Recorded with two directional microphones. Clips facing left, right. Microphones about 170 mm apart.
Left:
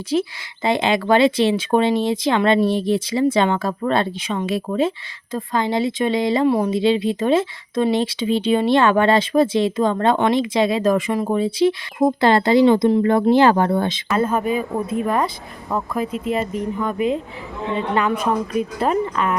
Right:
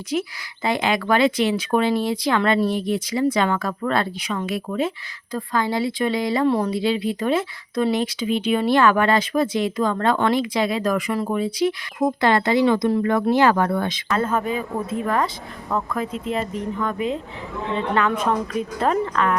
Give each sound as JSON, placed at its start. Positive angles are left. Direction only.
{"t": 0.1, "sound": "speech", "side_deg": 25}
{"t": 14.1, "sound": "speech", "side_deg": 10}